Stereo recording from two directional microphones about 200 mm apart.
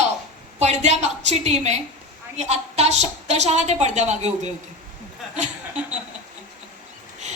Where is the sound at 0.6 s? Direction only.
35° right (ahead or behind).